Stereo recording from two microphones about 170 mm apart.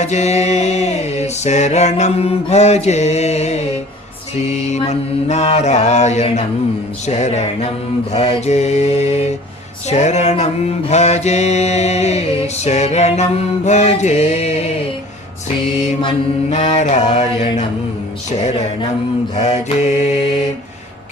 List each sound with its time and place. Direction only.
0.0 s mantra: 40° left (ahead or behind)
16.5 s mantra: 45° left (ahead or behind)
19.4 s mantra: 45° left (ahead or behind)